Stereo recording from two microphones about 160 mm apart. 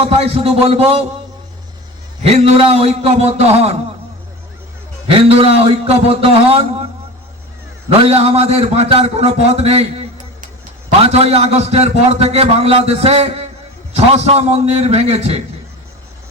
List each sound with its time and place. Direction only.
0.0 s a man's voice: 40° right (ahead or behind)
2.2 s a man's voice: 40° right (ahead or behind)
5.0 s a man's voice: 35° right (ahead or behind)
7.9 s a man's voice: 40° right (ahead or behind)